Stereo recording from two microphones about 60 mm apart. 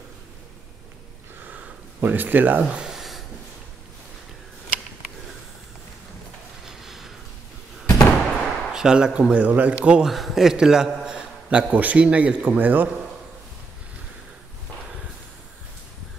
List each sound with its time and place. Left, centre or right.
1.4 s a sound: right
2.0 s speech: right
2.8 s a sound: centre
6.6 s mechanisms: centre
8.3 s speech: centre
10.0 s a man's voice: centre; by 12.9 s right